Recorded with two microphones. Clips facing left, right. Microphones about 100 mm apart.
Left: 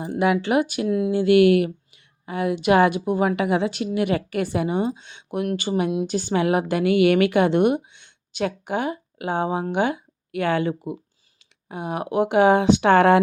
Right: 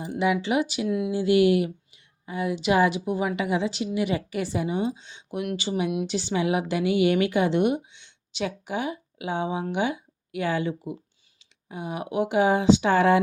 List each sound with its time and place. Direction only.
0.0 s a woman's voice: 55° left (ahead or behind)
0.9 s speech: 35° left (ahead or behind)
1.1 s a woman's voice: 60° left (ahead or behind)